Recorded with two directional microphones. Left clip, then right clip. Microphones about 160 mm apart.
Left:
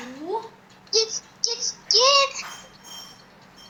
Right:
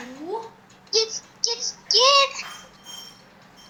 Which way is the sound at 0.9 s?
Centre (ahead or behind).